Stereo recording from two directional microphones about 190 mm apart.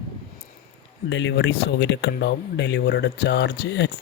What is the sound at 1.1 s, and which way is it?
Speech, 75° left (ahead or behind).